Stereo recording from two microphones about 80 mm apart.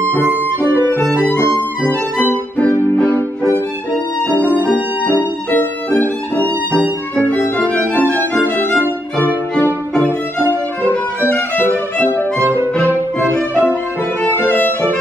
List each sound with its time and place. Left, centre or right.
0.0 s music: left
0.3 s music: right
1.3 s music: left
4.3 s music: left
5.9 s violin: left
9.9 s violin: left
12.4 s violin: right
13.2 s violin: left